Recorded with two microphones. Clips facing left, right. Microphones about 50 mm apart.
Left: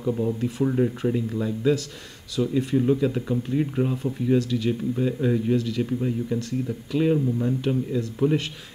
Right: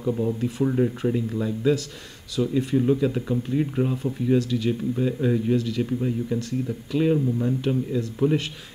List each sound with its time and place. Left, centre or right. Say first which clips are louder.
0.0 s speech: even; centre